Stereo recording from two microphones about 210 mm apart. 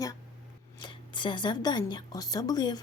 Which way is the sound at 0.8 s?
20° left (ahead or behind).